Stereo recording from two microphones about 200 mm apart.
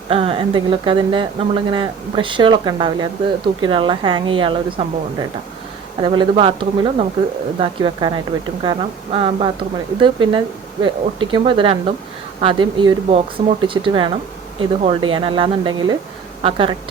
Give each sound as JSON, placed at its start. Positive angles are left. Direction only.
{"t": 0.1, "sound": "speech", "side_deg": -25}
{"t": 6.0, "sound": "speech", "side_deg": -25}